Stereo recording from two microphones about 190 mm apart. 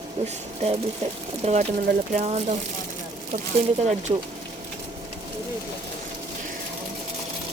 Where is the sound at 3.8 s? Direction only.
35° right (ahead or behind).